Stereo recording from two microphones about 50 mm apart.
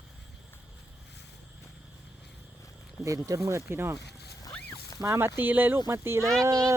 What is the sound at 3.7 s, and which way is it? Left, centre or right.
Speech, right.